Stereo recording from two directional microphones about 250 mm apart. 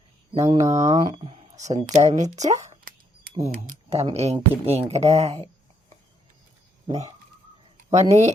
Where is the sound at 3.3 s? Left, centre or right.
Right.